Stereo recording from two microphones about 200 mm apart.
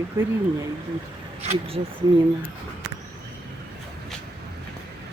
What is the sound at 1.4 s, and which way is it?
Speech, 30° right (ahead or behind).